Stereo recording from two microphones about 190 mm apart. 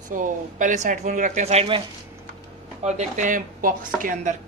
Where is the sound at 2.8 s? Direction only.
40° right (ahead or behind).